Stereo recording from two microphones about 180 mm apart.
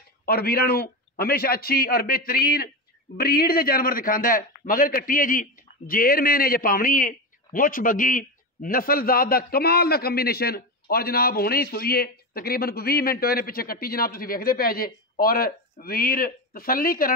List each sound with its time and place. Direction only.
0.2 s a man's voice: 60° left (ahead or behind)